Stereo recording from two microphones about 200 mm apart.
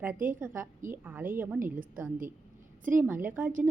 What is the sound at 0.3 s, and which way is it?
A woman's voice, 10° right (ahead or behind).